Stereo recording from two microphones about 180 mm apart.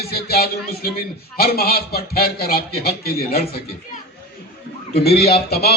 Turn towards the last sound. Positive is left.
turn(degrees=60)  # may be behind; listen again after turning